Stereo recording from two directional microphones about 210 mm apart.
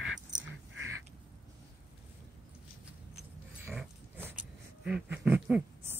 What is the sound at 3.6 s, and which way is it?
Dog, 10° right (ahead or behind).